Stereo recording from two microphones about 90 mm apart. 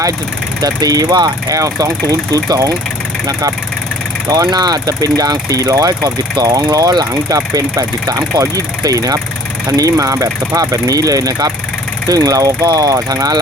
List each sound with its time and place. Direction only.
0.6 s speech: 45° right (ahead or behind)
4.4 s speech: 50° right (ahead or behind)